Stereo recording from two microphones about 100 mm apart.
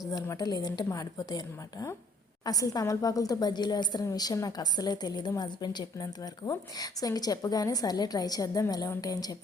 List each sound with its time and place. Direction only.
0.1 s a woman's voice: 40° left (ahead or behind)
2.4 s a woman's voice: 40° left (ahead or behind)